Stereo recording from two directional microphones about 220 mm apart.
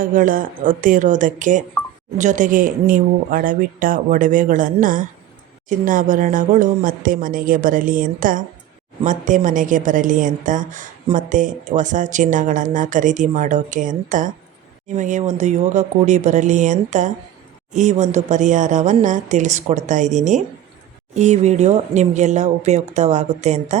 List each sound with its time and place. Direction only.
0.0 s a woman's voice: 40° right (ahead or behind)